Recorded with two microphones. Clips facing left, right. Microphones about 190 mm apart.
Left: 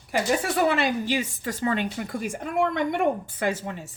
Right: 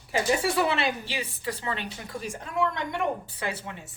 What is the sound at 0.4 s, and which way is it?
A woman's voice, 45° left (ahead or behind).